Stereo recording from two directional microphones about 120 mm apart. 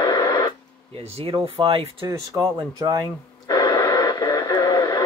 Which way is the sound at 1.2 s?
45° right (ahead or behind).